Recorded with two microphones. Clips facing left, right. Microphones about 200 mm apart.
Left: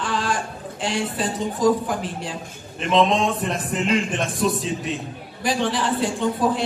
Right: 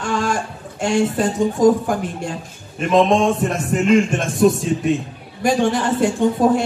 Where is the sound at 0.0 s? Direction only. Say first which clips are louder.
Right 4 dB; 45° right (ahead or behind).